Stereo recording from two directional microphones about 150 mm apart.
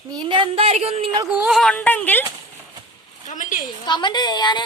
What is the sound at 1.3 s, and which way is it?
Speech, 5° right (ahead or behind).